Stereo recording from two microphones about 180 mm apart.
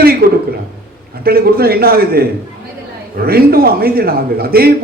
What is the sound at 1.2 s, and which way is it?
A man's voice, 55° right (ahead or behind).